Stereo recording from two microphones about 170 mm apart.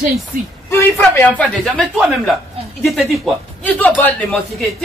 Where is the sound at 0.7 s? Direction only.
15° left (ahead or behind).